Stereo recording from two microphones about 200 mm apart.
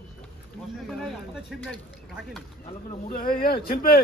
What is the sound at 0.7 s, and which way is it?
Speech, centre (ahead or behind).